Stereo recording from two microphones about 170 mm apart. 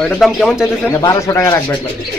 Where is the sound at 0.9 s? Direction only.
20° left (ahead or behind).